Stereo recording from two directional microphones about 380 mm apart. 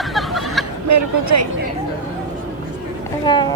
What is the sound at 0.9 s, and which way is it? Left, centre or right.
Speech, right.